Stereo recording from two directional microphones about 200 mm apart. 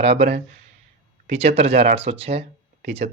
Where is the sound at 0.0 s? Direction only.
30° right (ahead or behind).